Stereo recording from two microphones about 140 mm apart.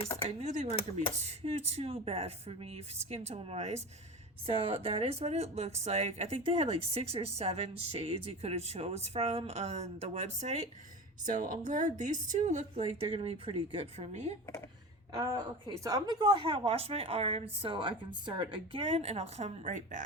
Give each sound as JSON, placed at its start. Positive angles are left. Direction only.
{"t": 0.3, "sound": "speech", "side_deg": -55}
{"t": 11.3, "sound": "speech", "side_deg": -70}
{"t": 12.8, "sound": "speech", "side_deg": -40}
{"t": 15.1, "sound": "a woman's voice", "side_deg": -25}